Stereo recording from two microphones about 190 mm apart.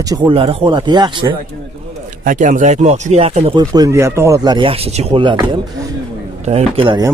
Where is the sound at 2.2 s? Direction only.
45° right (ahead or behind).